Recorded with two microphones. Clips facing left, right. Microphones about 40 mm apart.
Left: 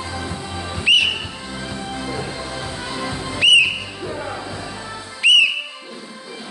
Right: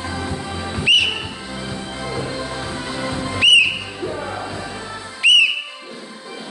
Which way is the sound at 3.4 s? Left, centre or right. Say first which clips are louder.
Even; centre.